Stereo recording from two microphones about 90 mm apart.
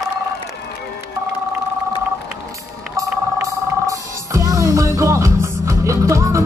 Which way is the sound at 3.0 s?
40° right (ahead or behind).